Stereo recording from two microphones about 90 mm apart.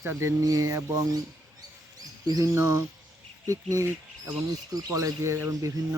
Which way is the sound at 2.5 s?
30° right (ahead or behind).